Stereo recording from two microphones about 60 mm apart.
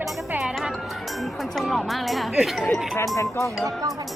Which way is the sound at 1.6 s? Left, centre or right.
Centre.